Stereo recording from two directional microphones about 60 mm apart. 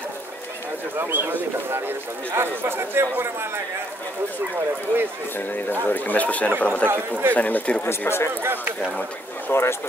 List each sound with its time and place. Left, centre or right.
0.9 s speech: right
5.5 s speech: left
6.9 s speech: right
7.3 s speech: left
7.8 s speech: left
8.4 s speech: right
9.5 s speech: left